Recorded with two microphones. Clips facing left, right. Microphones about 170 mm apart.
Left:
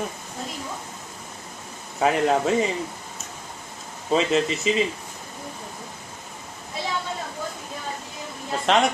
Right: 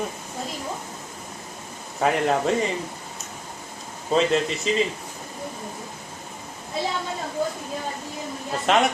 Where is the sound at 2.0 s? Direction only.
Centre (ahead or behind).